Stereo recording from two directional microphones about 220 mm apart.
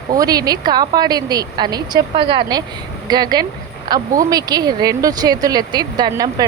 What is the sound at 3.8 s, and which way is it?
A woman's voice, 15° right (ahead or behind).